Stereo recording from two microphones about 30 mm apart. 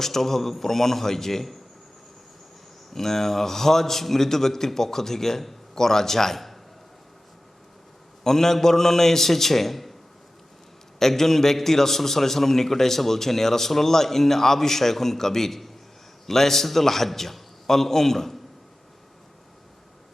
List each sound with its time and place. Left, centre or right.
0.0 s a man's voice: centre
2.9 s a man's voice: centre
8.2 s a man's voice: centre
11.2 s a man's voice: centre